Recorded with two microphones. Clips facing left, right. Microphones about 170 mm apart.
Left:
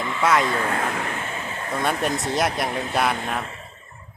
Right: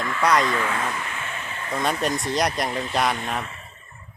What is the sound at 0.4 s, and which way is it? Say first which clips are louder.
Speech: even; 30° left (ahead or behind).